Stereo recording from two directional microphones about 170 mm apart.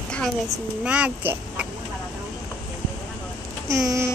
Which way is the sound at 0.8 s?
5° right (ahead or behind).